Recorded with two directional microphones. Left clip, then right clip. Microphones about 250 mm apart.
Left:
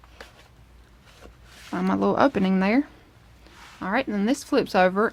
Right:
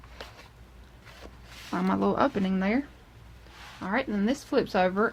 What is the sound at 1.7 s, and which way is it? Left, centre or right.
Speech, centre.